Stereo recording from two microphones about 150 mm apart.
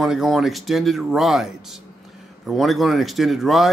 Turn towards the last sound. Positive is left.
turn(degrees=0)  # may be behind; listen again after turning